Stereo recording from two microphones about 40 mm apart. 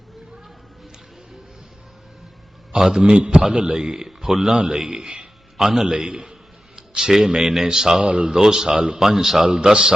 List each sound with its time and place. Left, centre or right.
2.7 s a man's voice: centre
6.7 s a sound: centre
7.5 s a man's voice: centre